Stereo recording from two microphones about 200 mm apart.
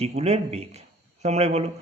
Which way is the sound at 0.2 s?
30° right (ahead or behind).